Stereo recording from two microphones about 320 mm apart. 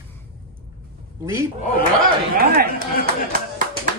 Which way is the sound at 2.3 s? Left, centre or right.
Right.